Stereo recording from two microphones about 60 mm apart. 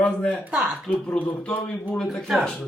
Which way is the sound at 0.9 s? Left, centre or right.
Centre.